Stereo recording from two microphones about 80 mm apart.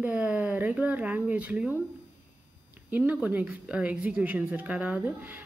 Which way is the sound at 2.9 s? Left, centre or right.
Right.